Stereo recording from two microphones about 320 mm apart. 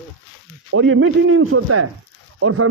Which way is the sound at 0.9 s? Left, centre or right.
Right.